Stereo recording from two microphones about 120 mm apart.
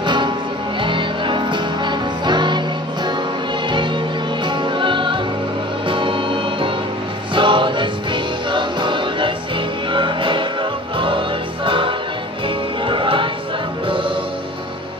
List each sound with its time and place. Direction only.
0.0 s music: 40° right (ahead or behind)
4.5 s music: 40° right (ahead or behind)